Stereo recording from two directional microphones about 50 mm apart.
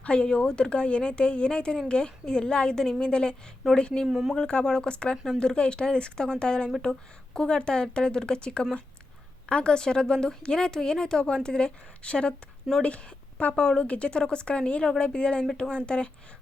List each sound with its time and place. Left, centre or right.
0.0 s a woman's voice: left
4.0 s speech: centre
4.4 s a woman's voice: centre